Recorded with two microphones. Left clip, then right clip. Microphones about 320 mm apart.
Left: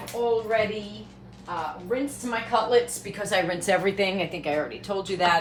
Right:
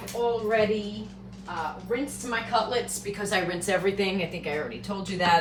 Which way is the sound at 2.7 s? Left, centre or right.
Left.